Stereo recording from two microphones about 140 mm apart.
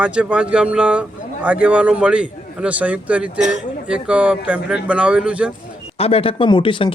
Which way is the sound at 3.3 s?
60° right (ahead or behind).